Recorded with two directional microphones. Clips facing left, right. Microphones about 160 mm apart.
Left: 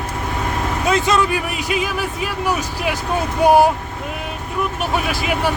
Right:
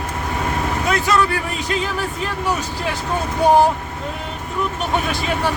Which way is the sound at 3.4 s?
10° left (ahead or behind).